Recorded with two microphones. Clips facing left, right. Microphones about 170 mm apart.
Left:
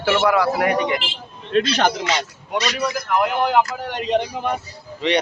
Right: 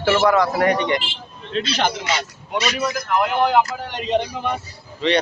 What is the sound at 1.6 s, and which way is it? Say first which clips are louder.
Speech: left 4 dB; 45° left (ahead or behind).